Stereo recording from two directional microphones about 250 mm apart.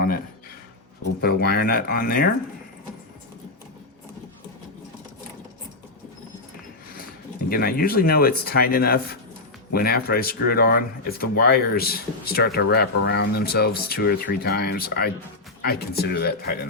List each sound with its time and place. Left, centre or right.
1.2 s speech: left
7.5 s speech: left